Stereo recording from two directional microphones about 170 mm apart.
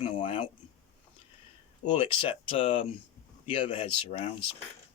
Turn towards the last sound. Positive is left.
turn(degrees=35)  # may be behind; listen again after turning